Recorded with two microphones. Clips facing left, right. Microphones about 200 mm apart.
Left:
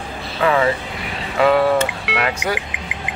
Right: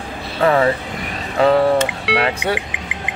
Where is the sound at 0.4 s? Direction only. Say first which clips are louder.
Right 2 dB; 35° right (ahead or behind).